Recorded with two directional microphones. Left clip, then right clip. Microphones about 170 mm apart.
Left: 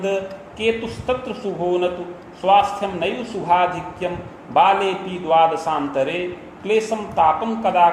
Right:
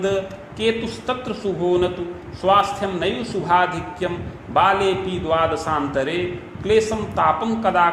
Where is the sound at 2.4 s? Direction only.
35° right (ahead or behind).